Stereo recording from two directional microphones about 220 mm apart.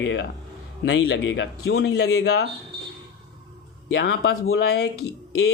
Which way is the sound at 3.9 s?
50° left (ahead or behind).